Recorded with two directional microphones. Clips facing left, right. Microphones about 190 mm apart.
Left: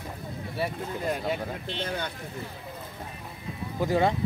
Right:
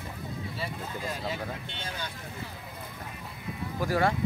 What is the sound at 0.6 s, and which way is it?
Speech, 60° left (ahead or behind).